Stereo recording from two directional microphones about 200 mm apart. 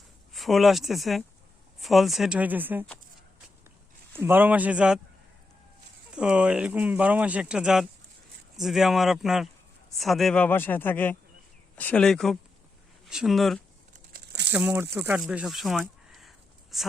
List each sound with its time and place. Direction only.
0.3 s speech: centre (ahead or behind)
4.2 s a man's voice: 10° right (ahead or behind)
6.1 s a man's voice: 5° right (ahead or behind)
14.1 s crumpling: 60° right (ahead or behind)
14.5 s a man's voice: 10° right (ahead or behind)